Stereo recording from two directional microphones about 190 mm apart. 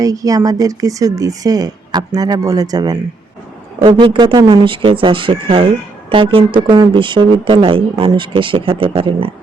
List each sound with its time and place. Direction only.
0.0 s speech: 20° right (ahead or behind)